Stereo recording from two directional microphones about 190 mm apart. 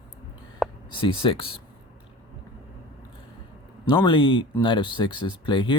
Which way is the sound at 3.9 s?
25° left (ahead or behind).